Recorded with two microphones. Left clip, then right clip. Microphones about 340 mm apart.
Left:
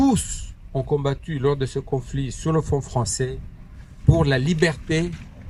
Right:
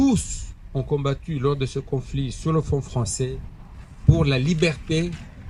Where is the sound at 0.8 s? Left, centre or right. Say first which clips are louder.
Left 2 dB; left.